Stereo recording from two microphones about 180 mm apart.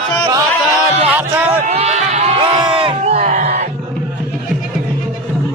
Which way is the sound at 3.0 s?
40° right (ahead or behind).